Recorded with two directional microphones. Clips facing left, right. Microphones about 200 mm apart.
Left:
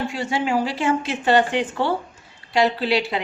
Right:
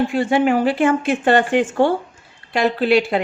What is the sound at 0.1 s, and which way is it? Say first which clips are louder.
A woman's voice: right 6 dB; 55° right (ahead or behind).